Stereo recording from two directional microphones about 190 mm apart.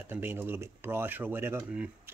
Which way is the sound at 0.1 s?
10° right (ahead or behind).